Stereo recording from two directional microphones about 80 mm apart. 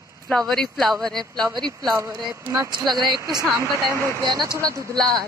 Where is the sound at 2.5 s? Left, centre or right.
Right.